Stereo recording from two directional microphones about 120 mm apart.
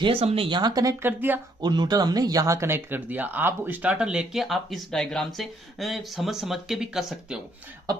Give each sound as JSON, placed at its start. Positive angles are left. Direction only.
{"t": 0.0, "sound": "speech", "side_deg": -50}
{"t": 1.0, "sound": "speech", "side_deg": -15}
{"t": 1.6, "sound": "speech", "side_deg": -35}